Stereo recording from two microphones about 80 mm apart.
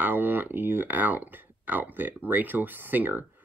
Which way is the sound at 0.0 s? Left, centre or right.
Right.